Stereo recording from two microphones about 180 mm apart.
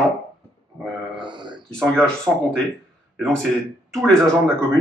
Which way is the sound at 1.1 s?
25° right (ahead or behind).